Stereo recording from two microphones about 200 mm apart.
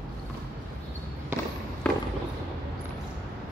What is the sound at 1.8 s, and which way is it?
Basketball bounce, 5° left (ahead or behind).